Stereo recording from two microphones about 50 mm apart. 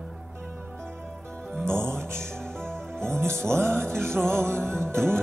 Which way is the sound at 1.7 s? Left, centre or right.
Right.